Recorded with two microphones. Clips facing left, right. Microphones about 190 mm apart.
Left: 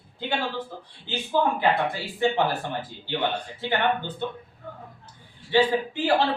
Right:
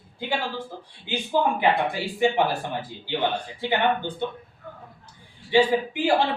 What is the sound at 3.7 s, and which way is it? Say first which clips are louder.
Speech: right 1 dB; 15° right (ahead or behind).